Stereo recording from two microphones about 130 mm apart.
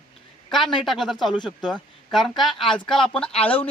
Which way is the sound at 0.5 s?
Centre (ahead or behind).